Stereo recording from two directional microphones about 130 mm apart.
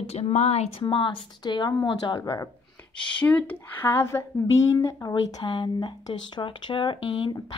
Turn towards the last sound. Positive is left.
turn(degrees=40)  # may be behind; listen again after turning